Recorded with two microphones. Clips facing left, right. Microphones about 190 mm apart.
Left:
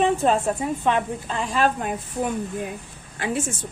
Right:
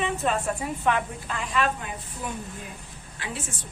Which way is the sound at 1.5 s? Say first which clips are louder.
Left 4 dB; 40° left (ahead or behind).